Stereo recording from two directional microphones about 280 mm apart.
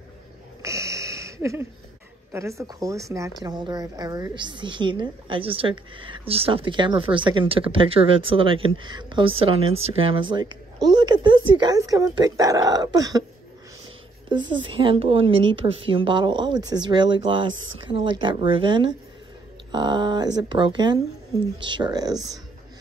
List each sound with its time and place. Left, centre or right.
0.6 s a sound: centre
2.3 s speech: centre
14.3 s speech: centre